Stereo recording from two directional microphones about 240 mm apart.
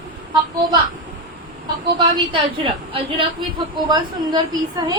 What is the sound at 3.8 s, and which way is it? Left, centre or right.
A woman's voice, centre.